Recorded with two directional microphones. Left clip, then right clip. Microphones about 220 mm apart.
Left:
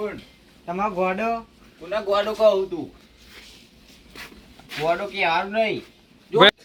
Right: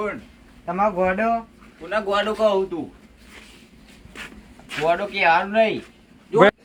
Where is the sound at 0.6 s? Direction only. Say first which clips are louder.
Right 3 dB; 20° right (ahead or behind).